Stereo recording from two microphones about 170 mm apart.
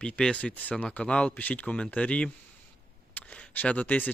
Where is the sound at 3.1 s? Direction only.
5° left (ahead or behind).